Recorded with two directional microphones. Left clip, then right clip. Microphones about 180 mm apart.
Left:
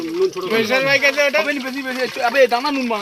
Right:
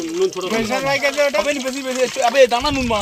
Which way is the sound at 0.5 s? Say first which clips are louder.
Left 7 dB; 60° right (ahead or behind).